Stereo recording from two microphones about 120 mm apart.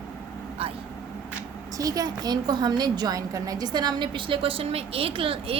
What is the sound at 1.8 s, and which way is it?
A woman's voice, 30° right (ahead or behind).